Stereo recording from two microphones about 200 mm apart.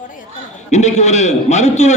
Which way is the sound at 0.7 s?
35° left (ahead or behind).